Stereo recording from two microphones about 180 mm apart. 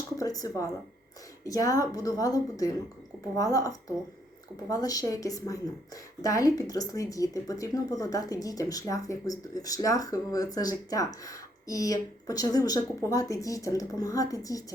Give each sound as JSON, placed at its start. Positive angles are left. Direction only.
{"t": 0.2, "sound": "a woman's voice", "side_deg": 20}